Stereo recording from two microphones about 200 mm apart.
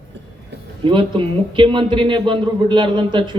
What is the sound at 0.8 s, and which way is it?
A man's voice, 25° right (ahead or behind).